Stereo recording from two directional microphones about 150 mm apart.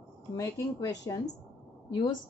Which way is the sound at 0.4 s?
25° left (ahead or behind).